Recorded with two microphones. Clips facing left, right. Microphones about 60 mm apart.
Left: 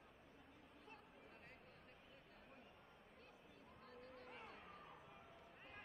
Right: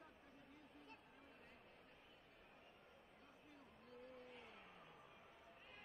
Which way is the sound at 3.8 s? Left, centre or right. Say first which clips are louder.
Even; left.